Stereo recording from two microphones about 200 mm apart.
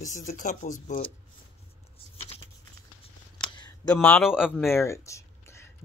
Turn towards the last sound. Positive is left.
turn(degrees=15)  # may be behind; listen again after turning